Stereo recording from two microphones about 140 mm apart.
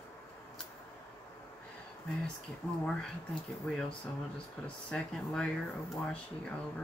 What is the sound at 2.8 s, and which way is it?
Speech, 5° left (ahead or behind).